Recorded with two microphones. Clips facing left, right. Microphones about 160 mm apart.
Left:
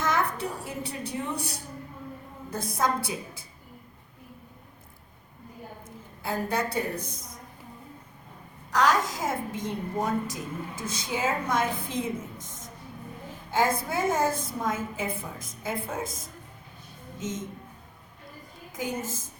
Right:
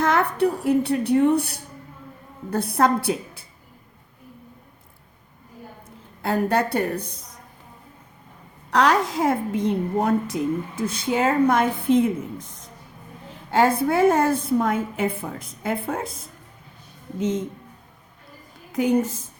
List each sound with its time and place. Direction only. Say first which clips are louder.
0.0 s a woman's voice: right 8 dB; 65° right (ahead or behind)
6.2 s a woman's voice: right 7 dB; 65° right (ahead or behind)
8.7 s a woman's voice: right 5 dB; 65° right (ahead or behind)
18.7 s a woman's voice: right 12 dB; 65° right (ahead or behind)